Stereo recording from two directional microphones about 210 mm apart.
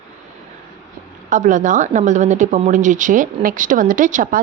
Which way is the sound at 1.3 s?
35° right (ahead or behind).